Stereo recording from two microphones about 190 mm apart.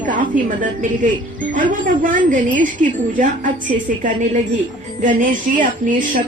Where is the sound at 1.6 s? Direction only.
45° right (ahead or behind).